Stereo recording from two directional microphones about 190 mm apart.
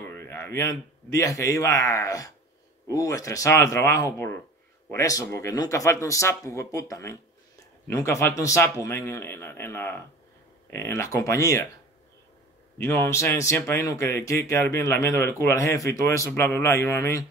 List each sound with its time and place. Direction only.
0.1 s a man's voice: 15° left (ahead or behind)
12.7 s speech: 15° left (ahead or behind)